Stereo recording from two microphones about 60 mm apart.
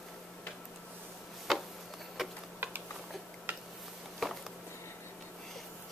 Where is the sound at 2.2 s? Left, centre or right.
Centre.